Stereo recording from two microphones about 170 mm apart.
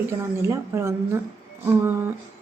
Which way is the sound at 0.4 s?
15° right (ahead or behind).